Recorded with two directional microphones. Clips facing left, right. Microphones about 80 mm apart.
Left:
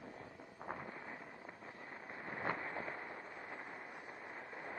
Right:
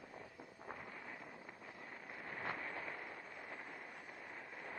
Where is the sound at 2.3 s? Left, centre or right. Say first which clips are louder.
Left 4 dB; left.